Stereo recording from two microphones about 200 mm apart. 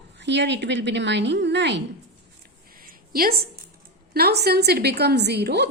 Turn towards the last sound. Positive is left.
turn(degrees=-55)  # may be behind; listen again after turning